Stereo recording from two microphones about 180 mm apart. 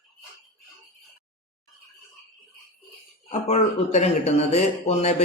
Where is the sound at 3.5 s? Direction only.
40° left (ahead or behind).